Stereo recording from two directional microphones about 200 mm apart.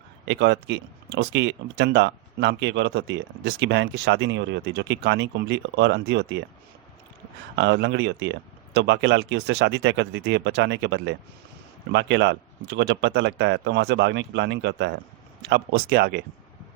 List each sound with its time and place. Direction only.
0.3 s speech: 60° right (ahead or behind)
7.5 s speech: 60° right (ahead or behind)